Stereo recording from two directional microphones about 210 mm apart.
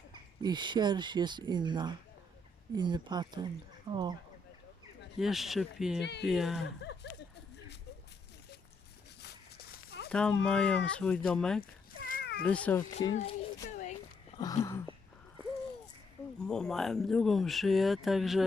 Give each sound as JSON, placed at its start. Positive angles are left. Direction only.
{"t": 0.1, "sound": "speech", "side_deg": -20}
{"t": 5.2, "sound": "speech", "side_deg": 0}
{"t": 6.0, "sound": "speech", "side_deg": 55}
{"t": 6.2, "sound": "speech", "side_deg": 0}
{"t": 6.8, "sound": "a sound", "side_deg": 55}
{"t": 9.2, "sound": "dog", "side_deg": 50}
{"t": 10.1, "sound": "speech", "side_deg": 5}
{"t": 11.9, "sound": "cat", "side_deg": 45}
{"t": 12.5, "sound": "speech", "side_deg": 5}
{"t": 12.8, "sound": "speech", "side_deg": 30}
{"t": 13.7, "sound": "a sound", "side_deg": 35}
{"t": 14.3, "sound": "a sound", "side_deg": 15}
{"t": 16.5, "sound": "speech", "side_deg": 5}